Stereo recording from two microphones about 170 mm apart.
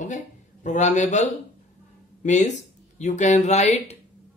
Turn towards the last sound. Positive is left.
turn(degrees=40)  # may be behind; listen again after turning